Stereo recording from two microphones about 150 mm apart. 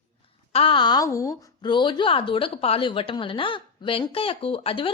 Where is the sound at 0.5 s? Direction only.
35° left (ahead or behind).